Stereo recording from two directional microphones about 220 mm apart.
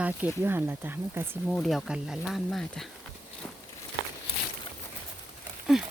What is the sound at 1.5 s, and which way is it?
Speech, centre (ahead or behind).